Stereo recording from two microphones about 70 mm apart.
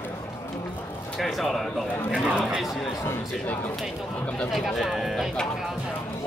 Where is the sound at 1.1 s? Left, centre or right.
Centre.